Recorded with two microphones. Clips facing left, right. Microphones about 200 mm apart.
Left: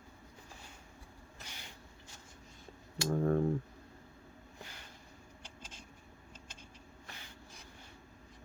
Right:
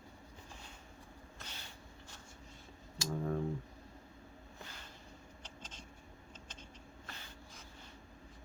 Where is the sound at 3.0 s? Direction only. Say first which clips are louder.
Left 6 dB; 55° left (ahead or behind).